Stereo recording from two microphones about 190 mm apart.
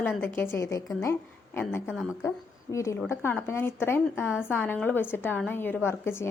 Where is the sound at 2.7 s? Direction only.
15° left (ahead or behind).